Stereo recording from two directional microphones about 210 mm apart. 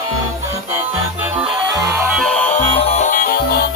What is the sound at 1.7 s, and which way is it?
Music, 15° right (ahead or behind).